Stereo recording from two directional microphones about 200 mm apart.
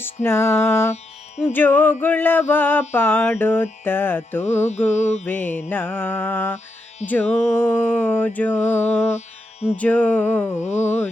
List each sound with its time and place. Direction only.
0.0 s mantra: 10° left (ahead or behind)
4.9 s mantra: 35° left (ahead or behind)
5.2 s mantra: 10° left (ahead or behind)